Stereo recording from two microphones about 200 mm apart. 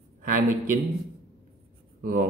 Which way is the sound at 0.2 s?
40° right (ahead or behind).